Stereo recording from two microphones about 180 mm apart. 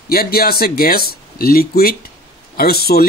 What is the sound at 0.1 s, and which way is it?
Speech, 55° left (ahead or behind).